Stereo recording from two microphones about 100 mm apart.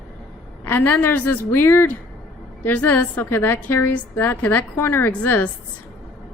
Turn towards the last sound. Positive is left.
turn(degrees=15)  # may be behind; listen again after turning